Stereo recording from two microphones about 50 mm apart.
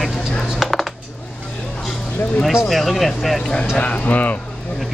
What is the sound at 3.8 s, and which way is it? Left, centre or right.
Speech, left.